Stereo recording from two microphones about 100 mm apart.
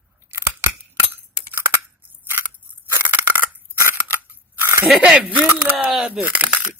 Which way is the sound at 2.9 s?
20° right (ahead or behind).